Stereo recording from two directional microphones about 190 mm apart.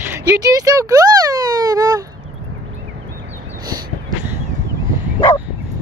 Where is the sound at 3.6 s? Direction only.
20° right (ahead or behind).